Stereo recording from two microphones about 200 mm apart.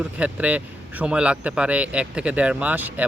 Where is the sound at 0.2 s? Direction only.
5° right (ahead or behind).